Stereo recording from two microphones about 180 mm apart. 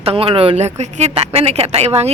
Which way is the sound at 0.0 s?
30° right (ahead or behind).